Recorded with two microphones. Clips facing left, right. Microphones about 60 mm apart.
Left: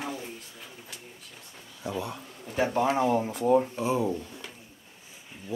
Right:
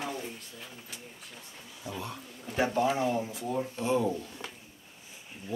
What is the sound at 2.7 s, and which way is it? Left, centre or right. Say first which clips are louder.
Speech: left 5 dB; left.